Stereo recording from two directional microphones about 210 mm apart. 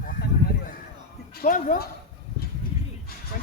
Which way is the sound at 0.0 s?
45° left (ahead or behind).